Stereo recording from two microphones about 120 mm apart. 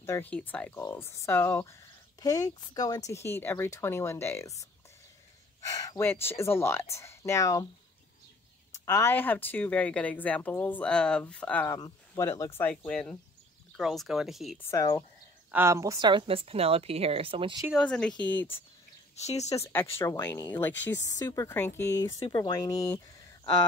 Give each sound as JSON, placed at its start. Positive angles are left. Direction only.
{"t": 0.0, "sound": "speech", "side_deg": 25}
{"t": 6.0, "sound": "speech", "side_deg": 20}
{"t": 8.7, "sound": "speech", "side_deg": 25}
{"t": 11.6, "sound": "speech", "side_deg": 25}
{"t": 12.8, "sound": "speech", "side_deg": 5}
{"t": 14.8, "sound": "speech", "side_deg": 30}
{"t": 15.5, "sound": "a woman's voice", "side_deg": -25}
{"t": 17.7, "sound": "speech", "side_deg": 5}
{"t": 19.1, "sound": "speech", "side_deg": 65}
{"t": 19.7, "sound": "speech", "side_deg": 20}
{"t": 21.0, "sound": "speech", "side_deg": 30}
{"t": 21.5, "sound": "speech", "side_deg": 20}
{"t": 21.9, "sound": "speech", "side_deg": 35}